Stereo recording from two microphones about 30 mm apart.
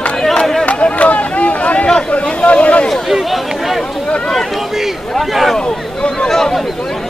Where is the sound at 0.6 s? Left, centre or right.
Left.